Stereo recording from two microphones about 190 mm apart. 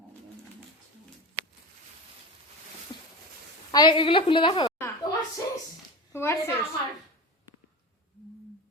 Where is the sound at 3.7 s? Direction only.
25° left (ahead or behind).